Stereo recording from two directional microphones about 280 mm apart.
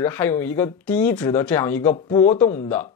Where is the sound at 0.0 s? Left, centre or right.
Centre.